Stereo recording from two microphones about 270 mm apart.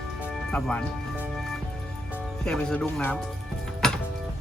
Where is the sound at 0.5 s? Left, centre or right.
Centre.